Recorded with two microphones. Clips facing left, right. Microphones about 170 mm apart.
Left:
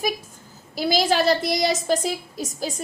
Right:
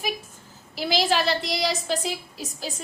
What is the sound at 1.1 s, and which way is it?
A woman's voice, 45° left (ahead or behind).